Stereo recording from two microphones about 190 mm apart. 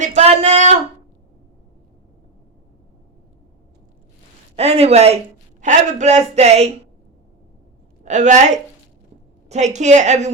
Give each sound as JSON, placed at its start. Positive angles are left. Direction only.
{"t": 0.0, "sound": "speech", "side_deg": -35}
{"t": 4.5, "sound": "speech", "side_deg": -30}
{"t": 8.0, "sound": "speech", "side_deg": -40}